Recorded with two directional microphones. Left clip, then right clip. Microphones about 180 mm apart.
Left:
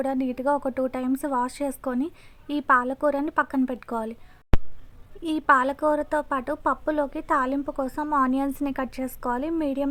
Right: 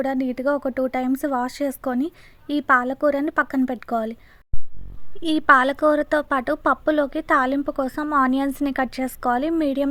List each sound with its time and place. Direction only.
0.0 s a woman's voice: 20° right (ahead or behind)
5.2 s a woman's voice: 20° right (ahead or behind)